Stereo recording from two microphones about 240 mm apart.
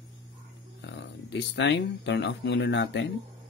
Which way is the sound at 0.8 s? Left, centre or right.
Left.